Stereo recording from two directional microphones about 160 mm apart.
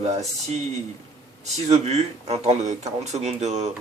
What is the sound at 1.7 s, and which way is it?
Speech, 40° right (ahead or behind).